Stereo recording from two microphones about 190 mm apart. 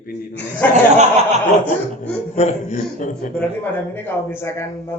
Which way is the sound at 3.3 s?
10° left (ahead or behind).